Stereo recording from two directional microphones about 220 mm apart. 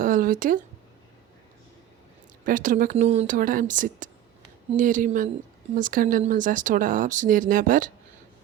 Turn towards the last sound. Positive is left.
turn(degrees=-40)  # may be behind; listen again after turning